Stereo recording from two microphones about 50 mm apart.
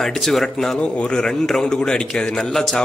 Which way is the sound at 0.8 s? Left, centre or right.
Left.